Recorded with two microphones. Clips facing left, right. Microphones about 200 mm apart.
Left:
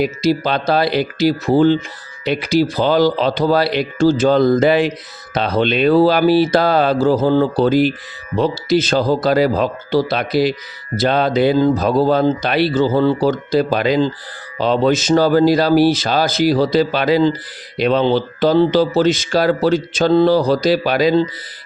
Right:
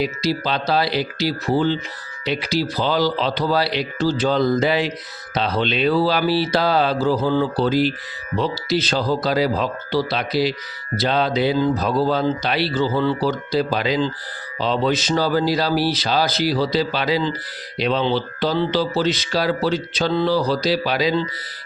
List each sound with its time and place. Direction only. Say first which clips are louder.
0.0 s speech: left 5 dB; 50° left (ahead or behind)